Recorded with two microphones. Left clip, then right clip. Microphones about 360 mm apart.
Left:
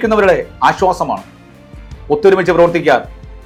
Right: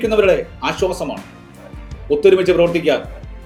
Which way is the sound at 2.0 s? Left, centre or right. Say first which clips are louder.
Left 2 dB; left.